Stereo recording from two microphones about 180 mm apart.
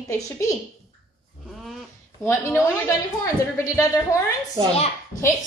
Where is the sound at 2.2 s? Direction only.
15° left (ahead or behind).